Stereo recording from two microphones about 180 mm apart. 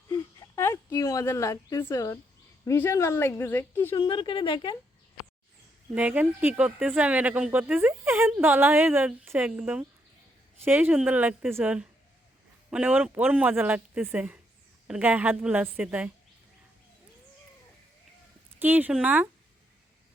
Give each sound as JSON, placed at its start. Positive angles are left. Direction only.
{"t": 0.1, "sound": "a sound", "side_deg": 15}
{"t": 2.6, "sound": "a woman's voice", "side_deg": 15}
{"t": 3.9, "sound": "a woman's voice", "side_deg": 25}
{"t": 5.9, "sound": "speech", "side_deg": -10}
{"t": 18.6, "sound": "speech", "side_deg": -10}